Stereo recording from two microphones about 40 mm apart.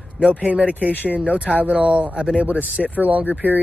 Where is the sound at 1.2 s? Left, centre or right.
Right.